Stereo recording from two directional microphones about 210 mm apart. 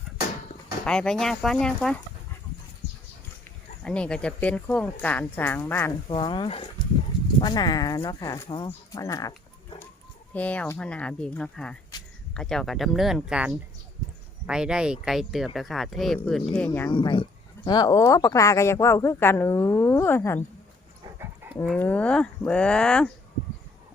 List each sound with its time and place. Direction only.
0.9 s speech: 5° left (ahead or behind)
3.8 s speech: 5° left (ahead or behind)
6.1 s speech: 20° left (ahead or behind)
16.9 s speech: 25° left (ahead or behind)
21.2 s dog: 10° right (ahead or behind)
21.6 s speech: 5° left (ahead or behind)